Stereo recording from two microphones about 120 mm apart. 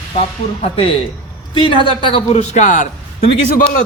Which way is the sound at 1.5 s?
45° left (ahead or behind).